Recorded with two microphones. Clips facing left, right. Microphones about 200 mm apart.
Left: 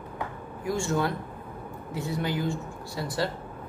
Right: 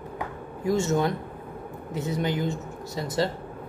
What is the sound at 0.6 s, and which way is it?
A woman's voice, 20° right (ahead or behind).